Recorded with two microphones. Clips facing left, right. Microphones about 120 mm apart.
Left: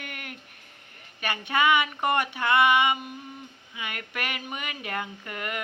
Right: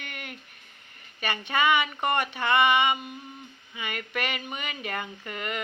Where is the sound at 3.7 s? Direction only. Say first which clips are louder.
Right 3 dB; 5° left (ahead or behind).